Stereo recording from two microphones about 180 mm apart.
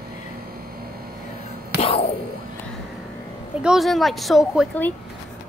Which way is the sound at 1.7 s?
35° left (ahead or behind).